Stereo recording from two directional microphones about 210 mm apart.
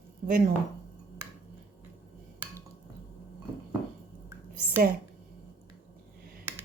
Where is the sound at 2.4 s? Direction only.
10° right (ahead or behind).